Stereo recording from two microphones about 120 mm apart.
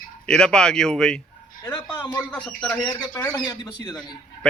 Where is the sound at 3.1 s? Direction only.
25° left (ahead or behind).